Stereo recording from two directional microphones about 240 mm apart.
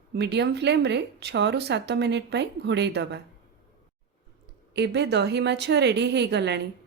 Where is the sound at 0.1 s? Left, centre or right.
Right.